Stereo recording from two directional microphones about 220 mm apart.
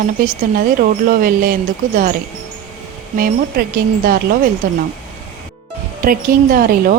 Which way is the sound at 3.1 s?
40° right (ahead or behind).